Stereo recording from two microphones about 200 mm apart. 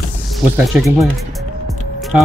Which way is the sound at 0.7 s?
5° right (ahead or behind).